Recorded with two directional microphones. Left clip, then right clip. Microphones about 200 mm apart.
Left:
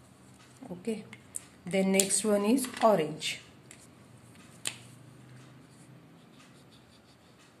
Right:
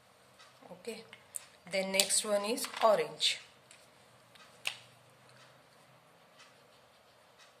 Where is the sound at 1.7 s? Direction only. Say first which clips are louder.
Left 3 dB; 20° right (ahead or behind).